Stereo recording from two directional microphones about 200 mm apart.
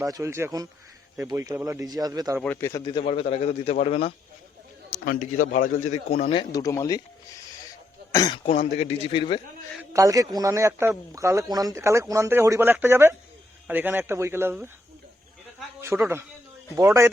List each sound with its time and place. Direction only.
0.0 s speech: 15° right (ahead or behind)
2.4 s speech: 10° left (ahead or behind)
3.0 s a man's voice: 30° left (ahead or behind)
4.9 s a sound: 40° left (ahead or behind)
5.5 s a man's voice: 40° left (ahead or behind); by 7.0 s 15° left (ahead or behind)
8.1 s a man's voice: 20° left (ahead or behind)
9.9 s speech: 15° right (ahead or behind)
15.8 s speech: 15° right (ahead or behind)